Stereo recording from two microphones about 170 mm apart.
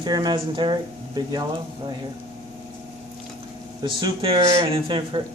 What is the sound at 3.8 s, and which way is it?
Speech, 30° right (ahead or behind).